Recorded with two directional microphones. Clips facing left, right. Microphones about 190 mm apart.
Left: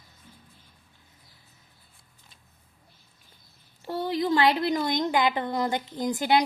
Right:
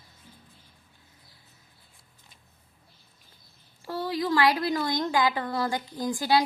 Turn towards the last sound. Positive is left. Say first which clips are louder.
# left 1 dB
turn(degrees=20)  # may be behind; listen again after turning